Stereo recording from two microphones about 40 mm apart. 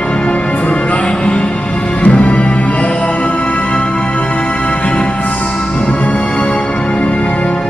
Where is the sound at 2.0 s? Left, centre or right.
Left.